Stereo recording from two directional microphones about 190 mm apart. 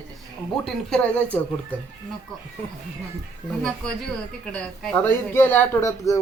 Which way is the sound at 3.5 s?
5° left (ahead or behind).